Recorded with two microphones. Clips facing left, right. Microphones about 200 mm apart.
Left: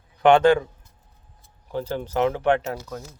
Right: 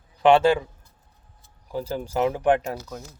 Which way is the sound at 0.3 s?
5° right (ahead or behind).